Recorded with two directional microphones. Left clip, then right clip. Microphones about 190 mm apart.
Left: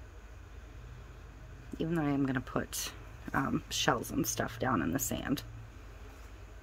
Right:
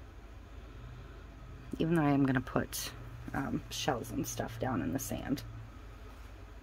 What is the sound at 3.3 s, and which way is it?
Speech, 20° left (ahead or behind).